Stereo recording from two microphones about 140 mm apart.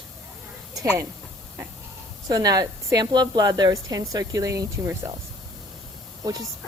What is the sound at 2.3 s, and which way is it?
A woman's voice, 25° right (ahead or behind).